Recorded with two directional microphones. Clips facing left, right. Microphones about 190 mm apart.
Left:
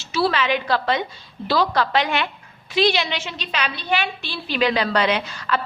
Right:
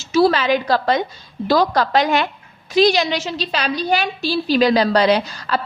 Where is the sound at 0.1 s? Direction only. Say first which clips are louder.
Right 6 dB; 40° right (ahead or behind).